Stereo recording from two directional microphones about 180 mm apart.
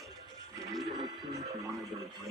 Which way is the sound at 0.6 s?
Centre (ahead or behind).